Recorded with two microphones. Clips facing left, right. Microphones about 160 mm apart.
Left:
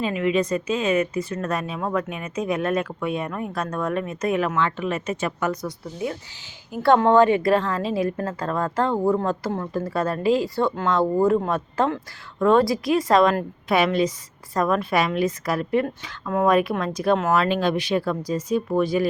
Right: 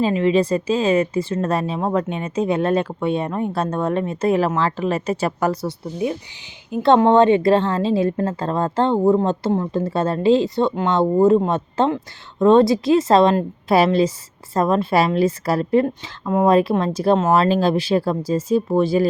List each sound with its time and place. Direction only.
0.0 s a woman's voice: 30° right (ahead or behind)